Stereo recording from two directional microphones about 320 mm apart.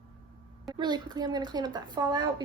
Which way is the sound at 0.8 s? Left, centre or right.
Centre.